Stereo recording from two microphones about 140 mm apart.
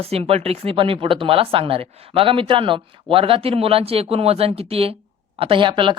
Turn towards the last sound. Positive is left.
turn(degrees=-35)  # may be behind; listen again after turning